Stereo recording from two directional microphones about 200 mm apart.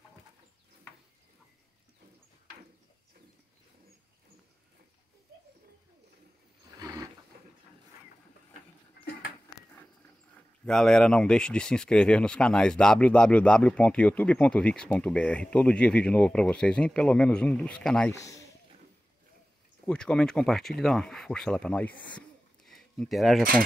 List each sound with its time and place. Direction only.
10.6 s speech: 5° left (ahead or behind)
18.1 s speech: 15° left (ahead or behind)
19.9 s speech: 5° left (ahead or behind)
22.7 s a sound: centre (ahead or behind)